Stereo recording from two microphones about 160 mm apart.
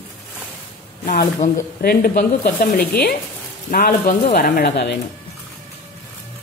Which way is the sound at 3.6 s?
65° left (ahead or behind).